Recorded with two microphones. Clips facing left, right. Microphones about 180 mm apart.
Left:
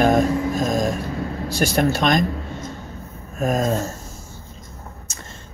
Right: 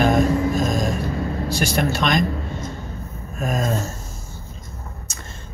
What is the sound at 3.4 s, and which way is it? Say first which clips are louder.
Speech: left 3 dB; 45° left (ahead or behind).